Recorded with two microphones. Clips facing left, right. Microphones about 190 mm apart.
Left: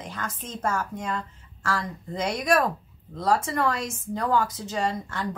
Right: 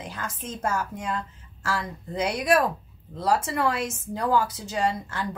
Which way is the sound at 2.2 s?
5° right (ahead or behind).